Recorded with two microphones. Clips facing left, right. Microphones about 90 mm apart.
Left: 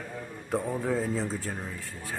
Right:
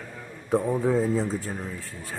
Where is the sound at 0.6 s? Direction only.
20° right (ahead or behind).